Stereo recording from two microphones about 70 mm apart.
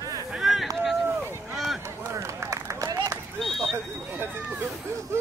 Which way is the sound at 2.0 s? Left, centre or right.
Right.